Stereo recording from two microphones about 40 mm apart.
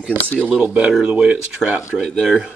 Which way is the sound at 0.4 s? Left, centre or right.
Right.